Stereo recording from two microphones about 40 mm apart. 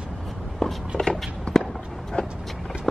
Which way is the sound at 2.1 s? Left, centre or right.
Left.